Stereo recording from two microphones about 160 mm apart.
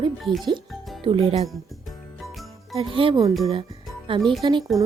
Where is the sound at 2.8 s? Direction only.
35° right (ahead or behind).